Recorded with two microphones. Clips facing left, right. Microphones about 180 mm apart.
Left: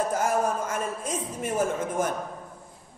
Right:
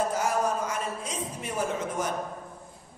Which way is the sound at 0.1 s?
50° left (ahead or behind).